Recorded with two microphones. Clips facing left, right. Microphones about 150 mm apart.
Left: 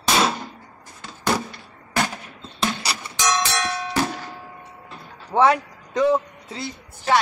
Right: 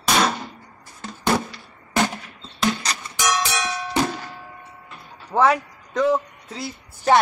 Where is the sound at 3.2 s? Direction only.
10° right (ahead or behind).